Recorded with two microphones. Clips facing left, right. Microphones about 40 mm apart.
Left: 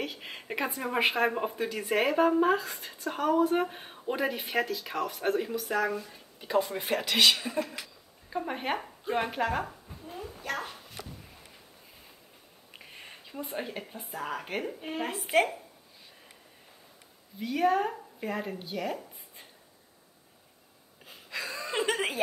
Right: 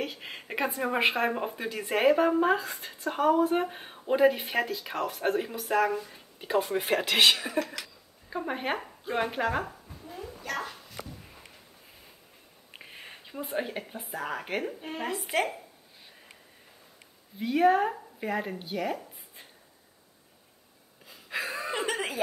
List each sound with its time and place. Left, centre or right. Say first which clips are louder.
0.2 s speech: right 2 dB; centre
6.6 s speech: right 3 dB; right
7.5 s speech: right 2 dB; right
8.3 s speech: right 1 dB; centre
10.0 s dog: left 1 dB; left
12.7 s speech: right 2 dB; centre
14.8 s speech: left 2 dB; centre
17.4 s speech: right 4 dB; centre
17.7 s a woman's voice: right 2 dB; centre
21.3 s a sound: right 3 dB; right
21.7 s a sound: left 4 dB; left